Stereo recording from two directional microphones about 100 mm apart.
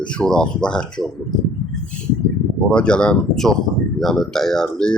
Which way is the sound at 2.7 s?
10° left (ahead or behind).